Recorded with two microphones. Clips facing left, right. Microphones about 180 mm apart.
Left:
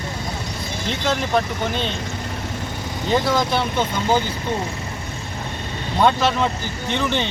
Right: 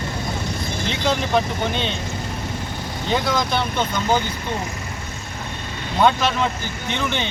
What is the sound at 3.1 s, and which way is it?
Speech, 5° left (ahead or behind).